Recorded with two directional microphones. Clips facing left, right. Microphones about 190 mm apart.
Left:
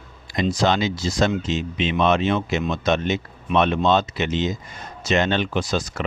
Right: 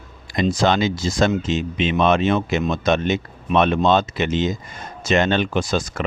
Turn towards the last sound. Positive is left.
turn(degrees=-50)  # may be behind; listen again after turning